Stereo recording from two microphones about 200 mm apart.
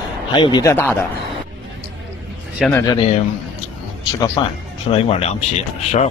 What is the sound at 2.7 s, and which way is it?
Speech, 20° left (ahead or behind).